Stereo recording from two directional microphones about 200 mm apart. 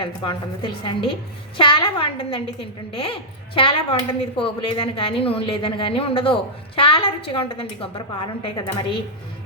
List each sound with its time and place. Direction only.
0.0 s speech: 25° left (ahead or behind)